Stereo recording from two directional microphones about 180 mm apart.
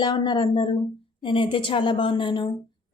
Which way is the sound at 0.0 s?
25° left (ahead or behind).